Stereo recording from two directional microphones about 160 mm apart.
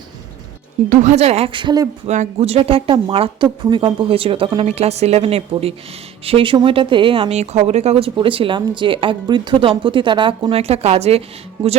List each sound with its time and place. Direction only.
0.9 s speech: 45° right (ahead or behind); by 1.9 s 25° right (ahead or behind)
2.0 s speech: 45° right (ahead or behind)